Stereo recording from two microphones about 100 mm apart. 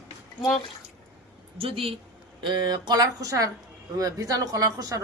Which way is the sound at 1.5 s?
75° right (ahead or behind).